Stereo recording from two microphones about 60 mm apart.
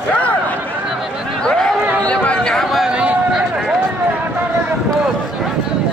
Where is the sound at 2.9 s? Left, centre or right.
Centre.